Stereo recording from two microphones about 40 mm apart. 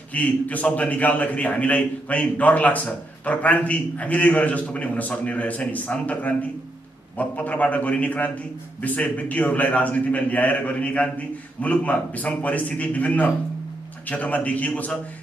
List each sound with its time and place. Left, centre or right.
0.1 s a man's voice: left